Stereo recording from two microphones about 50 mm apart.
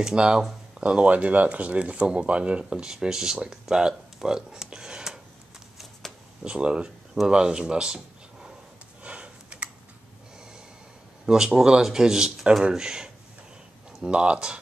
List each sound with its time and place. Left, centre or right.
0.0 s speech: centre
2.6 s speech: centre
3.3 s a sound: centre
6.4 s speech: centre
9.0 s a sound: right
11.2 s speech: centre